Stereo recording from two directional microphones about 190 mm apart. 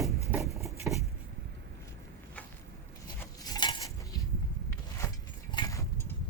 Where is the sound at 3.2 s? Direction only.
20° left (ahead or behind).